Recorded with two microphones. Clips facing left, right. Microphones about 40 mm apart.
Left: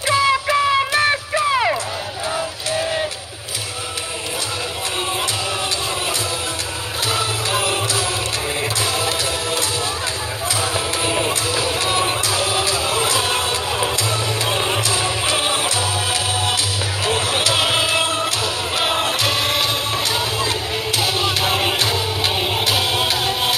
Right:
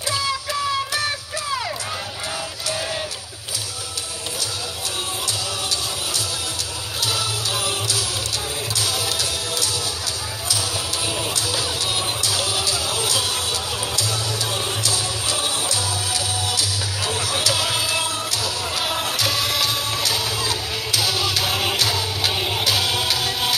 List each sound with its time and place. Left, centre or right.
0.1 s a sound: left
7.1 s music: left
10.5 s music: left; by 23.5 s centre